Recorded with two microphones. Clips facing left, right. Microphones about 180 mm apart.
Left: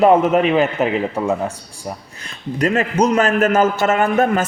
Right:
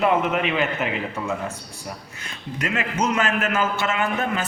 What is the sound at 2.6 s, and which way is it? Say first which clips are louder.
A man's voice: left 9 dB; 35° left (ahead or behind).